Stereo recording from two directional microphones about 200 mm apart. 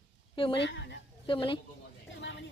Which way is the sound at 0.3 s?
25° left (ahead or behind).